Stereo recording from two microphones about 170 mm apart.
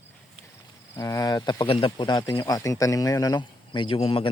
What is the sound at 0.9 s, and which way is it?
Speech, 20° left (ahead or behind).